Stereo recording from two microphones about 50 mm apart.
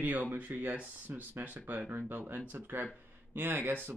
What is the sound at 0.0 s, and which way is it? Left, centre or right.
Speech, right.